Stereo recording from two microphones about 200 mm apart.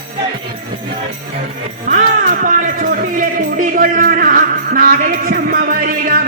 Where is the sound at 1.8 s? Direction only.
40° right (ahead or behind).